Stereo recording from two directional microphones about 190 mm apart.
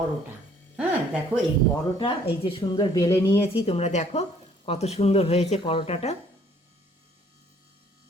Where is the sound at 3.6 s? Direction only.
35° left (ahead or behind).